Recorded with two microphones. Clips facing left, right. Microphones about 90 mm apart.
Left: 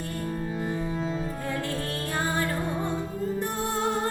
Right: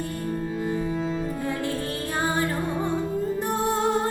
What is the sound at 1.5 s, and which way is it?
Music, 15° right (ahead or behind).